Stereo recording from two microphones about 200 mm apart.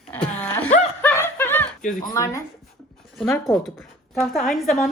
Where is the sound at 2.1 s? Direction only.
15° left (ahead or behind).